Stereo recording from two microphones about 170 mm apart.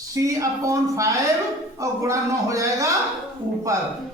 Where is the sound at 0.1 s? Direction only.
20° right (ahead or behind).